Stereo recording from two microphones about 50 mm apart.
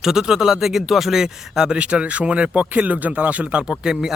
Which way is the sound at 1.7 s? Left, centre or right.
Right.